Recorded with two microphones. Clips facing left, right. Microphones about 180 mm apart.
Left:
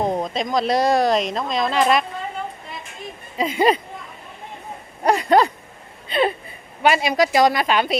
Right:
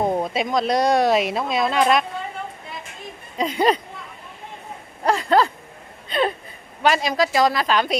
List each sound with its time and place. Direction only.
0.0 s speech: 5° right (ahead or behind)
3.3 s speech: 5° left (ahead or behind)
5.0 s speech: 15° left (ahead or behind)
7.2 s a woman's voice: 20° left (ahead or behind)